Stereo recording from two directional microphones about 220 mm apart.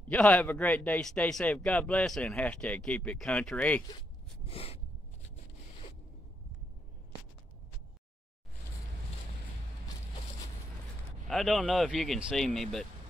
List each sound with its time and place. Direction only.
0.1 s speech: 5° left (ahead or behind)
4.5 s a sound: 25° left (ahead or behind)
11.2 s speech: centre (ahead or behind)